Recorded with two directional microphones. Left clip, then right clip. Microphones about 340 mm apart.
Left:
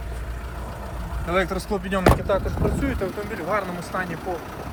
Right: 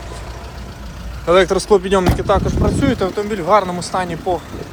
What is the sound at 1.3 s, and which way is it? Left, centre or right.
Speech, centre.